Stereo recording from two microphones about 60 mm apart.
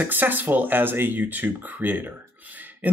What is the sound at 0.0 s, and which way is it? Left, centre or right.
Speech, right.